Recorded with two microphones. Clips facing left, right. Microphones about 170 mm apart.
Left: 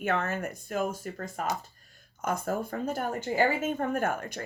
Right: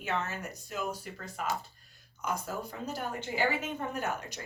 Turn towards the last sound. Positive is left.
turn(degrees=50)  # may be behind; listen again after turning